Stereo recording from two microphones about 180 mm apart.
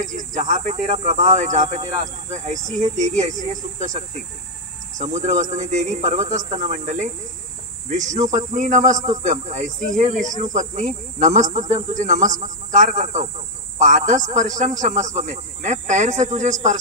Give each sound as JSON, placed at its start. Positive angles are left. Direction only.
{"t": 0.0, "sound": "speech", "side_deg": -45}